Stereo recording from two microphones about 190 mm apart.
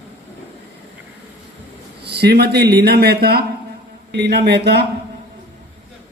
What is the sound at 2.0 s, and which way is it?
A man's voice, 60° right (ahead or behind).